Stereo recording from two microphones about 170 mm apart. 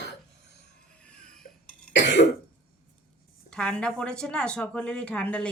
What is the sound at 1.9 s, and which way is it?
Cough, 90° left.